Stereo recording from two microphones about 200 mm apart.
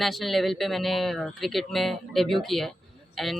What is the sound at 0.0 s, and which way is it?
Speech, centre (ahead or behind).